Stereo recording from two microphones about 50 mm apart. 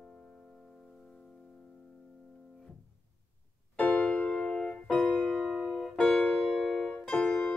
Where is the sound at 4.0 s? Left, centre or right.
Left.